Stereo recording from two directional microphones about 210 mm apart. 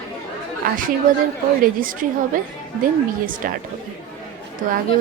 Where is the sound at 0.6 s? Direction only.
45° right (ahead or behind).